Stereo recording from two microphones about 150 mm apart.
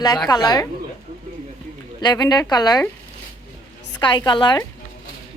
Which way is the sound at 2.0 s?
25° left (ahead or behind).